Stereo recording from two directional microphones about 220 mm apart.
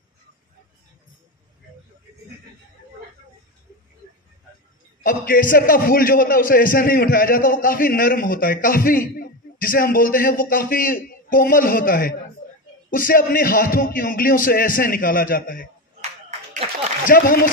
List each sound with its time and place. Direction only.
5.0 s a man's voice: 40° left (ahead or behind)
17.0 s a man's voice: 40° left (ahead or behind)